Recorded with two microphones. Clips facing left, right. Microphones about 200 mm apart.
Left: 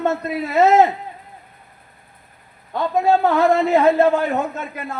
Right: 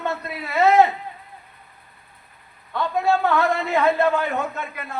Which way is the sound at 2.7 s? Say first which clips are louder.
Left 4 dB; 40° left (ahead or behind).